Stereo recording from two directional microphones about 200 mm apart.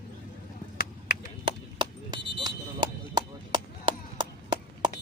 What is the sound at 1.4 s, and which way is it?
Chop, 20° right (ahead or behind).